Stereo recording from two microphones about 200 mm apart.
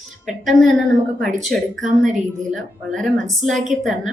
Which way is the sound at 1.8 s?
40° right (ahead or behind).